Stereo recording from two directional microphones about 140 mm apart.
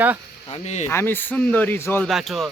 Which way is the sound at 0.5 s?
50° left (ahead or behind).